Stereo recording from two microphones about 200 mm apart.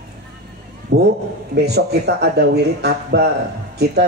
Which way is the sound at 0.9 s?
55° right (ahead or behind).